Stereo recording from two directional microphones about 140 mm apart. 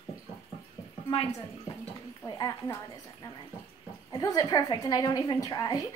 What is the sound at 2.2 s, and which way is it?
Speech, 30° left (ahead or behind).